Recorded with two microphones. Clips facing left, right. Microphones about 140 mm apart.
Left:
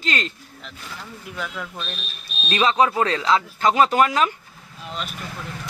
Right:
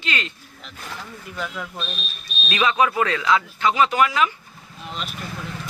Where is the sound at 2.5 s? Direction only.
30° left (ahead or behind).